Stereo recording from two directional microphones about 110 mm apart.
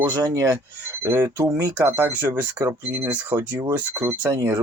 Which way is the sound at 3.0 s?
15° right (ahead or behind).